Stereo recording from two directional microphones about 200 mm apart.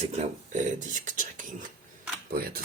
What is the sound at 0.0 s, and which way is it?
Speech, 30° right (ahead or behind).